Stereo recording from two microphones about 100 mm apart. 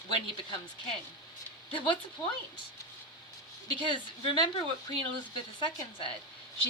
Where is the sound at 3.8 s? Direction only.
60° left (ahead or behind).